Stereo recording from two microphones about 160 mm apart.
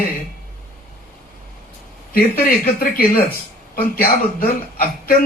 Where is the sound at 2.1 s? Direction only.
70° left (ahead or behind).